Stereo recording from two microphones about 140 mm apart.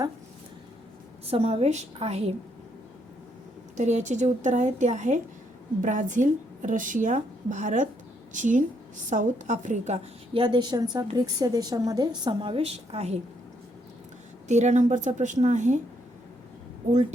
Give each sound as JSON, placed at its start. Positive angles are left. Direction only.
{"t": 1.3, "sound": "a woman's voice", "side_deg": -45}
{"t": 3.8, "sound": "a woman's voice", "side_deg": -55}
{"t": 10.3, "sound": "a woman's voice", "side_deg": -30}
{"t": 14.4, "sound": "a woman's voice", "side_deg": -55}